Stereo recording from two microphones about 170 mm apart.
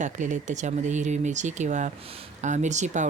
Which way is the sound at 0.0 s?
45° right (ahead or behind).